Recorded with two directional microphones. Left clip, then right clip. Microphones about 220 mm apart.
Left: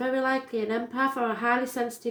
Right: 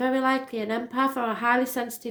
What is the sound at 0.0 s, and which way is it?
Speech, 40° right (ahead or behind).